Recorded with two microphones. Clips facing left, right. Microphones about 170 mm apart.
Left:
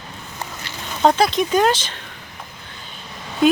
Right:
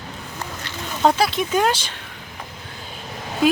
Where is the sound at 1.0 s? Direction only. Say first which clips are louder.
Left 2 dB; 5° right (ahead or behind).